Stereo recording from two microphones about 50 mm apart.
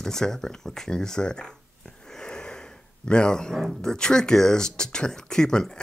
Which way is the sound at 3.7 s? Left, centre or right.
Centre.